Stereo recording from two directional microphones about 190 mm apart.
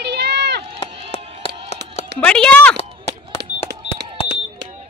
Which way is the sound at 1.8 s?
60° right (ahead or behind).